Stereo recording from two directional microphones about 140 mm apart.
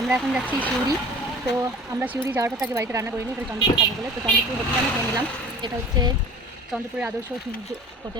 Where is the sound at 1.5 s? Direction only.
20° right (ahead or behind).